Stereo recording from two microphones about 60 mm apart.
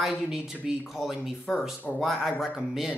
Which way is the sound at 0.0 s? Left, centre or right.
Centre.